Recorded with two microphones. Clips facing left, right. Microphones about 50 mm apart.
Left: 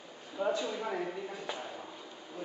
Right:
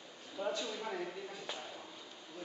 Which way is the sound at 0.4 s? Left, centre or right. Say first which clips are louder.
Left 6 dB; centre.